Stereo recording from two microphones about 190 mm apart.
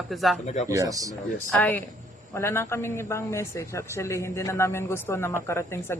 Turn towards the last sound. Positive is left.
turn(degrees=15)  # may be behind; listen again after turning